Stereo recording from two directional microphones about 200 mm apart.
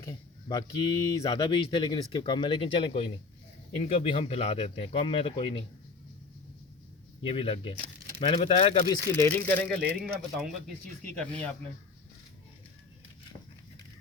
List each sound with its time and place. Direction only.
0.0 s speech: 20° left (ahead or behind)
7.2 s speech: 25° left (ahead or behind)
9.1 s speech: 10° left (ahead or behind)
9.8 s a man's voice: 10° right (ahead or behind)